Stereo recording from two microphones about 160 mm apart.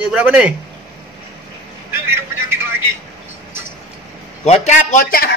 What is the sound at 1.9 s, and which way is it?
Vehicle, 15° right (ahead or behind).